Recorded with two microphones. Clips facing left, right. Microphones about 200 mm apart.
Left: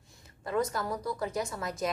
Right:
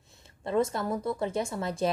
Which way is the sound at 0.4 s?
25° right (ahead or behind).